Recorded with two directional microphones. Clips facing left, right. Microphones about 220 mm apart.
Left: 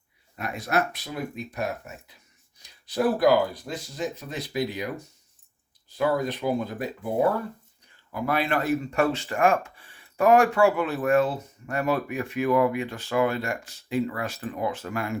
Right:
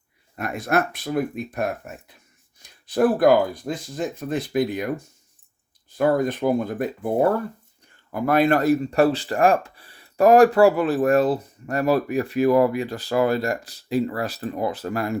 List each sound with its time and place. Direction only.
0.3 s speech: 50° right (ahead or behind)
8.1 s speech: 45° right (ahead or behind)